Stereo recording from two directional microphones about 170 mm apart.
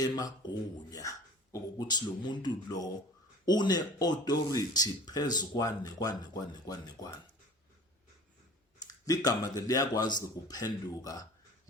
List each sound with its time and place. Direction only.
0.0 s speech: 25° left (ahead or behind)
8.9 s speech: 20° left (ahead or behind)